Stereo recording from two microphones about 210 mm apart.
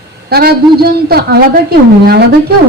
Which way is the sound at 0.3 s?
45° right (ahead or behind).